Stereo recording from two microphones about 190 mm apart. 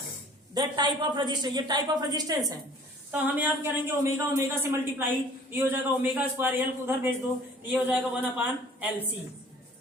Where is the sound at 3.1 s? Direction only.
10° right (ahead or behind).